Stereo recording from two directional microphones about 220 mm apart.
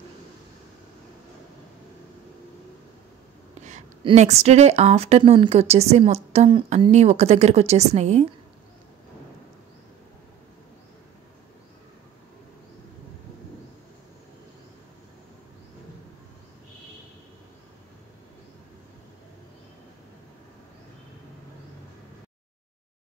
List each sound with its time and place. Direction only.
3.6 s speech: 30° right (ahead or behind)